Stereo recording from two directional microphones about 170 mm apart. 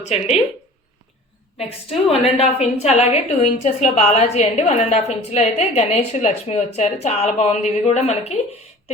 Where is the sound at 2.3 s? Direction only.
40° left (ahead or behind).